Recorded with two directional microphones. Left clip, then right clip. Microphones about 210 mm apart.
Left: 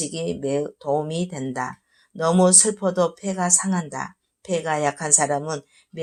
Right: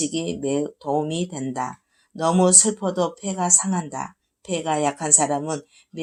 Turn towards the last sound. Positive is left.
turn(degrees=25)  # may be behind; listen again after turning